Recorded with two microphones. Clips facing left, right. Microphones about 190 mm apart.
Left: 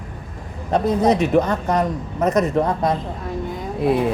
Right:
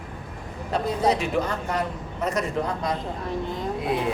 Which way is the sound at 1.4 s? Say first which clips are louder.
Left 7 dB; 40° left (ahead or behind).